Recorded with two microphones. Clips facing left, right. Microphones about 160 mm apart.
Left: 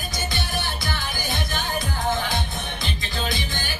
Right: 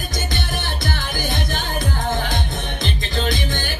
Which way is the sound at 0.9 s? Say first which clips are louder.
Right 4 dB; 50° right (ahead or behind).